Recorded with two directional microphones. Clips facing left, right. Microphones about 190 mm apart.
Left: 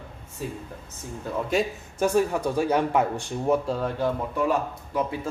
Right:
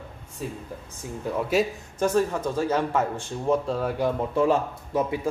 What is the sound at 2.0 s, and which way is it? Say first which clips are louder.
Speech: left 1 dB; 10° left (ahead or behind).